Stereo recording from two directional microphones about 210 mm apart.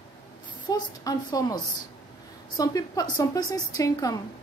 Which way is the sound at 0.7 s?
15° left (ahead or behind).